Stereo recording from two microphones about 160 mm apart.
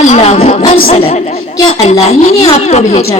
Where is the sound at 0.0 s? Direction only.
45° left (ahead or behind).